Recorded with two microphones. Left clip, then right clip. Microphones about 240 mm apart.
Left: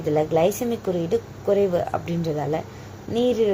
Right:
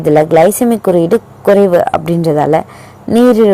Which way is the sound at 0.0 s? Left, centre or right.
Right.